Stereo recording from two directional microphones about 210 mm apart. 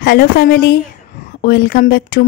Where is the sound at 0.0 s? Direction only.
45° left (ahead or behind).